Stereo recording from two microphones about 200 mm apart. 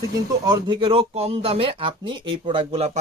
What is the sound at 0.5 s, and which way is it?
Speech, 25° right (ahead or behind).